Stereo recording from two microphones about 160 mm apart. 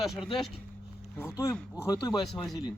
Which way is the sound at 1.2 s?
20° left (ahead or behind).